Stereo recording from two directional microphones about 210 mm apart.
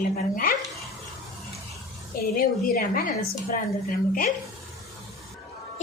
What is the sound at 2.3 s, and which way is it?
Speech, 45° left (ahead or behind).